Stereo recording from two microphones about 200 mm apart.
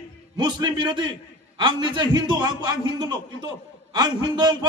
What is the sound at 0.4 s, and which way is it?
A man's voice, 20° right (ahead or behind).